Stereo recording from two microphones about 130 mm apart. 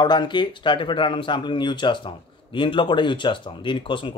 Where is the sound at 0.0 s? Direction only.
35° left (ahead or behind).